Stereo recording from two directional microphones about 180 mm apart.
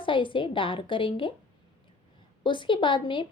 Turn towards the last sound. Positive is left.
turn(degrees=25)  # may be behind; listen again after turning